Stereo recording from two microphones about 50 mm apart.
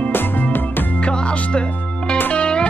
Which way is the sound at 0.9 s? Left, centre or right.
Left.